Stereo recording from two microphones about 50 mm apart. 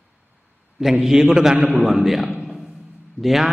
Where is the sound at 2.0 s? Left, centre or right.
Centre.